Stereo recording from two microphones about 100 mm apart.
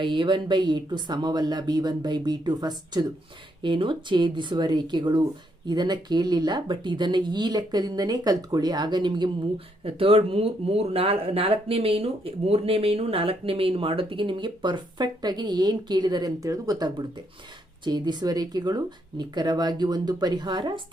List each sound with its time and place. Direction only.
0.0 s speech: 55° right (ahead or behind)
3.6 s speech: 55° right (ahead or behind)
9.8 s speech: 65° right (ahead or behind); by 20.8 s 50° right (ahead or behind)